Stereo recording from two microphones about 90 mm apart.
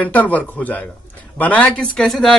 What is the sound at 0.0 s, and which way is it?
Speech, 15° left (ahead or behind).